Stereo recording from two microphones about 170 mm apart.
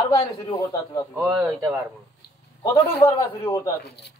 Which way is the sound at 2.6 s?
25° left (ahead or behind).